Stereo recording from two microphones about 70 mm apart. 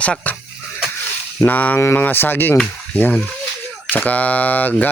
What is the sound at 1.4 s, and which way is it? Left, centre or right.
Speech, left.